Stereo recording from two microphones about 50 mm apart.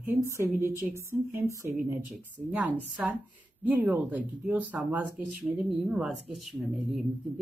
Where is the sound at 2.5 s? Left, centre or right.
Right.